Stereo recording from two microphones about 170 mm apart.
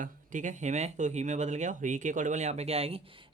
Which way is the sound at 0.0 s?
50° right (ahead or behind).